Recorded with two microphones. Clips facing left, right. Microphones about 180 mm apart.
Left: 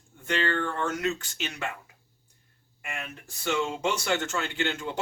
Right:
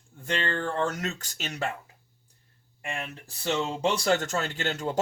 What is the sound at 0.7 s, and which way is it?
Speech, 35° right (ahead or behind).